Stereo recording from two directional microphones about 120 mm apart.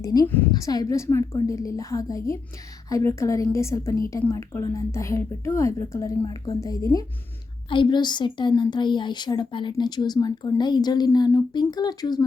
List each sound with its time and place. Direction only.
0.0 s a woman's voice: 30° left (ahead or behind)
7.7 s a woman's voice: 40° left (ahead or behind)